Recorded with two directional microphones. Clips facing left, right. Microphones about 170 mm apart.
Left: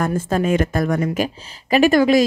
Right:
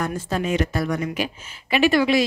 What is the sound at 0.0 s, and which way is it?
A woman's voice, 50° left (ahead or behind).